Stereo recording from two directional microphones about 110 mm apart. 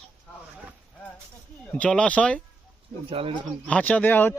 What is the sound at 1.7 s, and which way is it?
Speech, 10° left (ahead or behind).